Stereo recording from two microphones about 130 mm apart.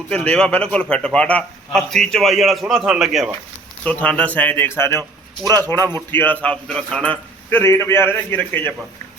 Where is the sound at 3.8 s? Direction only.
10° left (ahead or behind).